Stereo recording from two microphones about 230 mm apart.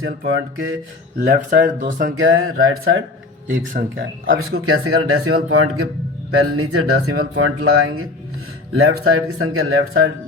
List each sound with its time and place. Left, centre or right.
0.3 s speech: right
1.2 s speech: right
2.1 s speech: right
3.8 s speech: right
4.5 s speech: right